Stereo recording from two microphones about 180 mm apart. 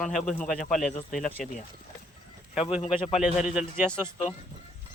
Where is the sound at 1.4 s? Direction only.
45° left (ahead or behind).